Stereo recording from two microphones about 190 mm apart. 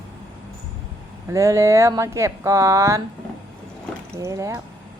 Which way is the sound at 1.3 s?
15° right (ahead or behind).